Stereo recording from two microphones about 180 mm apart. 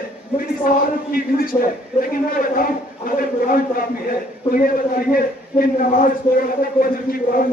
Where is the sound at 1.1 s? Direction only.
55° left (ahead or behind).